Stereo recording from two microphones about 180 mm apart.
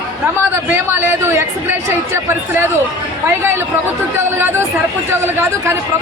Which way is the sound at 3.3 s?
15° right (ahead or behind).